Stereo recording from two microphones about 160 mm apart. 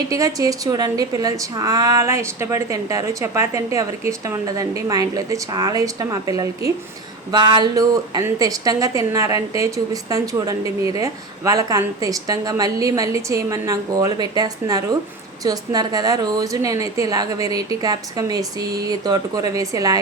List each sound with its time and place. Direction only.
0.1 s a woman's voice: 20° right (ahead or behind)